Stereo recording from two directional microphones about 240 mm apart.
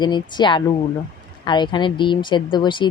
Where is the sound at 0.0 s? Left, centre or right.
Centre.